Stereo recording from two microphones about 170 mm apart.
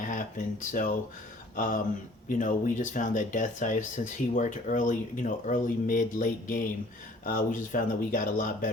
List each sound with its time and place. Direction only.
0.0 s speech: 50° left (ahead or behind)